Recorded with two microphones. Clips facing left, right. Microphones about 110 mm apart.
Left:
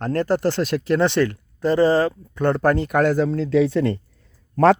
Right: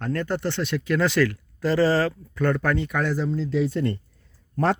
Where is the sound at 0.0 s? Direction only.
35° left (ahead or behind).